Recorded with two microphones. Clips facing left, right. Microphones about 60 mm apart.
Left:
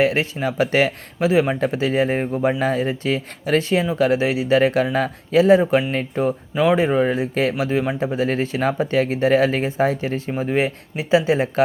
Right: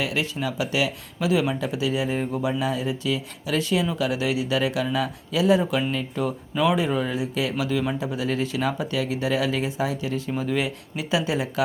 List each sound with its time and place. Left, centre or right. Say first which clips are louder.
0.0 s speech: left 7 dB; left
6.5 s speech: left 4 dB; left
6.7 s speech: left 6 dB; left